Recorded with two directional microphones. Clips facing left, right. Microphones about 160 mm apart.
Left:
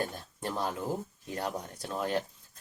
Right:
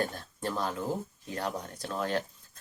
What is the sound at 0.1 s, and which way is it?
Speech, 15° left (ahead or behind).